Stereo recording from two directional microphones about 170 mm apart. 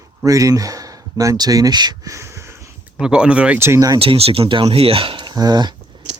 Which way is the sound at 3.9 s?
35° right (ahead or behind).